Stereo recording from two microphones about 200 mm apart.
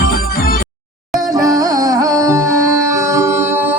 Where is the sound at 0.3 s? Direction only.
45° left (ahead or behind).